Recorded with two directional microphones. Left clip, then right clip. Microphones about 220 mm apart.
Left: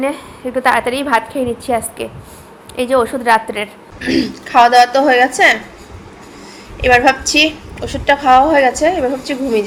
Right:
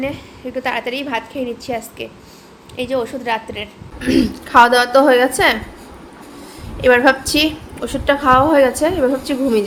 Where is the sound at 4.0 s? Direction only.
20° right (ahead or behind).